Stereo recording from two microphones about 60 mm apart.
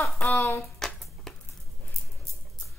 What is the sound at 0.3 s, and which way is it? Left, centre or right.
Hands, left.